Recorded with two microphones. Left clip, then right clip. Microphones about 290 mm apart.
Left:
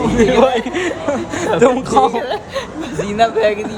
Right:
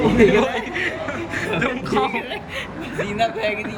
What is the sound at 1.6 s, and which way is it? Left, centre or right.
A man's voice, centre.